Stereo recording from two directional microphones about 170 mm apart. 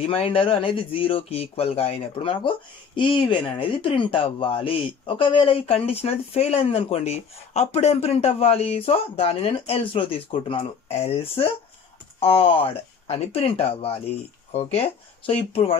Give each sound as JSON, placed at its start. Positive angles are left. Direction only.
{"t": 0.0, "sound": "speech", "side_deg": 35}